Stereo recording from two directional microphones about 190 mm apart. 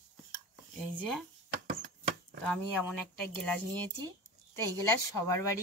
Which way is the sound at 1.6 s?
50° right (ahead or behind).